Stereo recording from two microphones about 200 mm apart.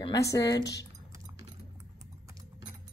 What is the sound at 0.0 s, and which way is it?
Speech, 15° left (ahead or behind).